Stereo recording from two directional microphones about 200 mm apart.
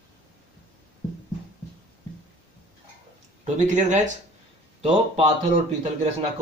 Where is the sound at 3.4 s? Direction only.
35° right (ahead or behind).